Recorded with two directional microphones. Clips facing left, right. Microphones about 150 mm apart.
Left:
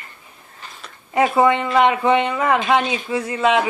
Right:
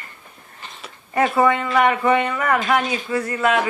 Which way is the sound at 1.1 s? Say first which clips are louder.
Left 2 dB; 15° left (ahead or behind).